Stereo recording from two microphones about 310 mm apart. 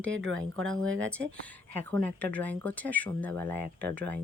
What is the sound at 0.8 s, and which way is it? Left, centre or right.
Speech, right.